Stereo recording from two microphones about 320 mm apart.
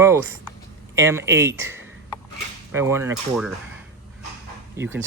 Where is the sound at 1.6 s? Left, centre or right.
Centre.